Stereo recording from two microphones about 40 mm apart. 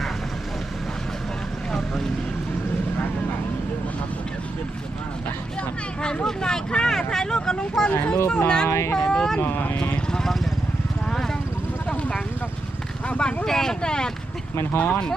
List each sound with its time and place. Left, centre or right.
6.2 s vehicle: centre
7.8 s a sound: centre
8.1 s speech: left
13.1 s a sound: left
13.4 s speech: centre
14.5 s speech: left
14.8 s speech: left